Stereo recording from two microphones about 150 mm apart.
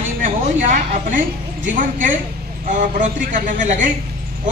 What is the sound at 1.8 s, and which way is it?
A man's voice, 60° right (ahead or behind).